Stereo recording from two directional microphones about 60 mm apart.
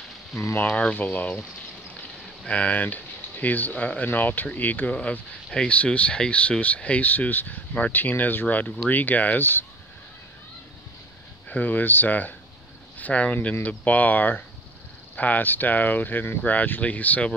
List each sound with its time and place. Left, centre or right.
0.6 s speech: left
2.4 s speech: left
4.9 s speech: centre; by 9.7 s left
11.4 s speech: left